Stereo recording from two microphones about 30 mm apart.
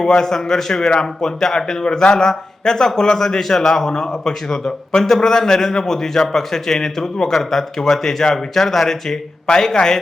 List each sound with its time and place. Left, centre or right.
0.2 s a man's voice: centre
9.7 s speech: left